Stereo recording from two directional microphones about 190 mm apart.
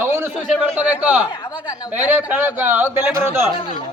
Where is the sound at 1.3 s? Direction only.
20° left (ahead or behind).